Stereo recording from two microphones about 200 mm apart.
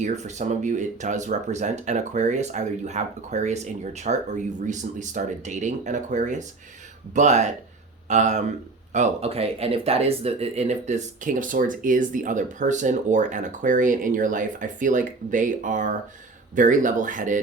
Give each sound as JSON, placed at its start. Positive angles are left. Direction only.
{"t": 0.0, "sound": "speech", "side_deg": -35}